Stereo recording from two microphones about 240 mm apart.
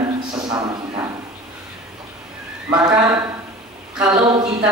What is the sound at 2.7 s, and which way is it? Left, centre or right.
Speech, centre.